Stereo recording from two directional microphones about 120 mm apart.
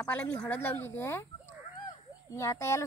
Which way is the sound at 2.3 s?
25° left (ahead or behind).